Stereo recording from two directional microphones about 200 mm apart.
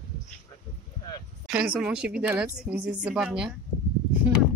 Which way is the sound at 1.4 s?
5° right (ahead or behind).